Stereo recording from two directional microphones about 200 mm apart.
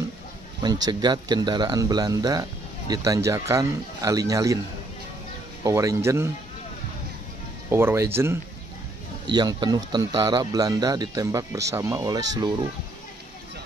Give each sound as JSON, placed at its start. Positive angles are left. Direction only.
{"t": 0.8, "sound": "speech", "side_deg": -20}
{"t": 5.6, "sound": "speech", "side_deg": -15}
{"t": 7.7, "sound": "speech", "side_deg": -10}